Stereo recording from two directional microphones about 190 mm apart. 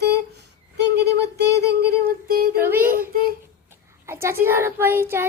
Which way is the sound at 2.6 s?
10° right (ahead or behind).